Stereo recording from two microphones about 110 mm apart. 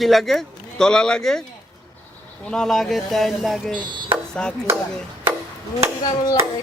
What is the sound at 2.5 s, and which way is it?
Speech, 5° left (ahead or behind).